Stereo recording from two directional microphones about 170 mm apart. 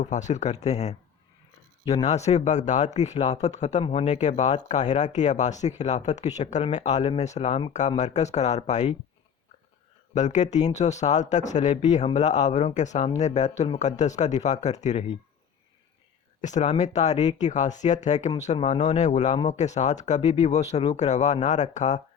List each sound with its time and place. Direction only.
0.0 s speech: 45° left (ahead or behind)
10.2 s speech: 45° left (ahead or behind)
16.4 s speech: 45° left (ahead or behind)